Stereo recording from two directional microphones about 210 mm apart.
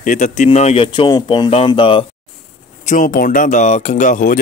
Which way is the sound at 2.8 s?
40° left (ahead or behind).